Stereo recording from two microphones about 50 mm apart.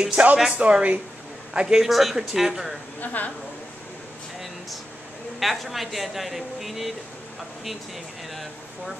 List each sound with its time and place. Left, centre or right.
0.0 s speech: right
1.5 s speech: centre
1.9 s speech: centre
3.0 s a woman's voice: left
5.4 s speech: centre